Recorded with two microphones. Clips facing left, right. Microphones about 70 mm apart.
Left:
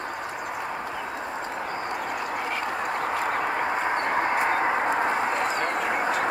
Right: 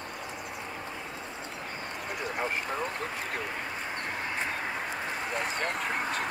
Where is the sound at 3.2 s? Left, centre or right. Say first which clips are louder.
Left 10 dB; left.